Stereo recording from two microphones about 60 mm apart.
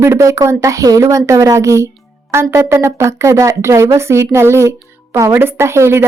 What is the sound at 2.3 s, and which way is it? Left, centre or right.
Speech, right.